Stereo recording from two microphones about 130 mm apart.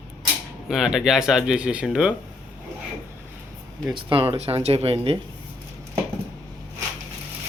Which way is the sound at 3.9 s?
45° right (ahead or behind).